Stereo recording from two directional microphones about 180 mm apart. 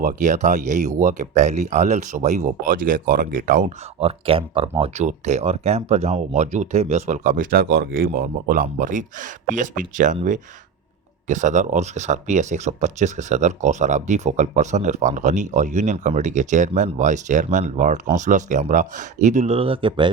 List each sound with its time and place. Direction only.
0.0 s speech: 45° right (ahead or behind)
4.0 s speech: 30° right (ahead or behind)